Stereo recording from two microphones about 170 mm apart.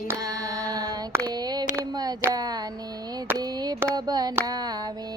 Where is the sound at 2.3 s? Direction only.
25° right (ahead or behind).